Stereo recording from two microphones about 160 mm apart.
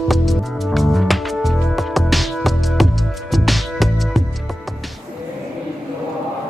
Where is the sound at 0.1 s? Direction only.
Centre (ahead or behind).